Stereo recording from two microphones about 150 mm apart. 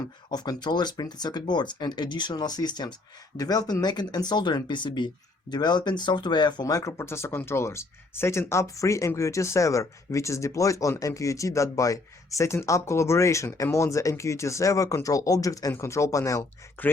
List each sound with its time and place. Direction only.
0.3 s speech: 25° left (ahead or behind)